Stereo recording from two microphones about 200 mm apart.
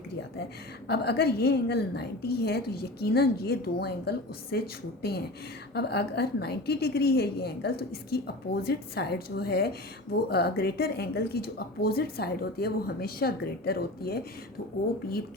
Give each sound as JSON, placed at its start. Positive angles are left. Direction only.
{"t": 0.9, "sound": "a woman's voice", "side_deg": 55}